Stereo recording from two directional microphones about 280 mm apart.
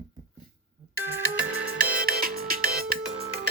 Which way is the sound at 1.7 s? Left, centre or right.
Right.